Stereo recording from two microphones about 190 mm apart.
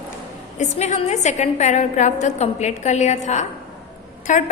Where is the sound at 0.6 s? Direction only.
35° left (ahead or behind).